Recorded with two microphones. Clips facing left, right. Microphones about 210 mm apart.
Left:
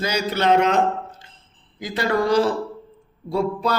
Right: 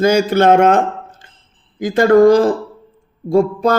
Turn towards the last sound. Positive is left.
turn(degrees=-45)  # may be behind; listen again after turning